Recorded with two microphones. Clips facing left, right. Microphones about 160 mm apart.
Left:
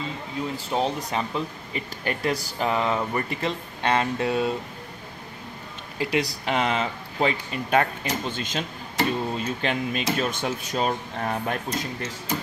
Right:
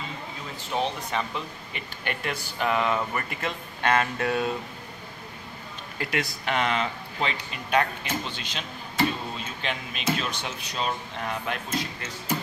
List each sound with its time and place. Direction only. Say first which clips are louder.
1.1 s speech: left 3 dB; 35° left (ahead or behind)
6.2 s speech: left 2 dB; 35° left (ahead or behind)